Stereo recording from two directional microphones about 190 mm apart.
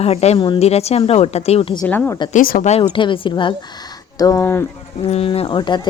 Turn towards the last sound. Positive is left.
turn(degrees=25)  # may be behind; listen again after turning